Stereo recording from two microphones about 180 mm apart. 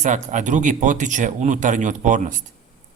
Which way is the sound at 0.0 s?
40° right (ahead or behind).